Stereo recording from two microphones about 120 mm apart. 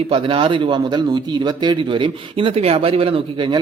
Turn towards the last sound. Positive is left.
turn(degrees=-45)  # may be behind; listen again after turning